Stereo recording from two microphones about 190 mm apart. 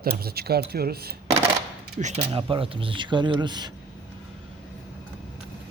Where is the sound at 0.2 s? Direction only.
55° right (ahead or behind).